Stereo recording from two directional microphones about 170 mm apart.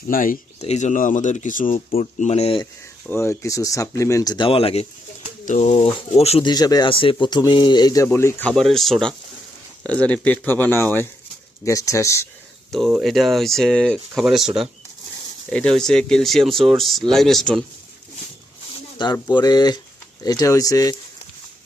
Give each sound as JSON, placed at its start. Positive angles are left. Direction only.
{"t": 0.1, "sound": "speech", "side_deg": 55}
{"t": 0.6, "sound": "speech", "side_deg": 40}
{"t": 2.0, "sound": "speech", "side_deg": 40}
{"t": 3.1, "sound": "speech", "side_deg": 15}
{"t": 6.5, "sound": "speech", "side_deg": 25}
{"t": 12.7, "sound": "speech", "side_deg": 0}
{"t": 19.3, "sound": "speech", "side_deg": 25}